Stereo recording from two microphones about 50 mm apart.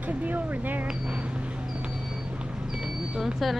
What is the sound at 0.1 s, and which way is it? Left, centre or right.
Speech, right.